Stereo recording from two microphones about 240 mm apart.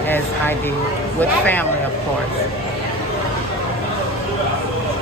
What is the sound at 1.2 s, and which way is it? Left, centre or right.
Speech, centre.